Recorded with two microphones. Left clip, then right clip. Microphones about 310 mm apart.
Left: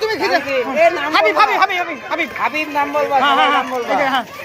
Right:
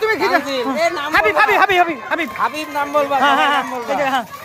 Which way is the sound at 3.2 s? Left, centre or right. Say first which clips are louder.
Left 1 dB; centre.